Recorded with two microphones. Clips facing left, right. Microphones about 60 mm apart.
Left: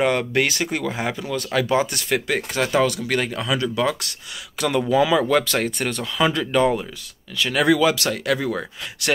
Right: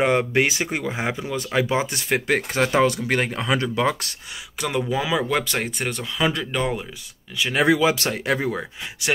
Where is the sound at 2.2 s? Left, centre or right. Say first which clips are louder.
Right 2 dB; right.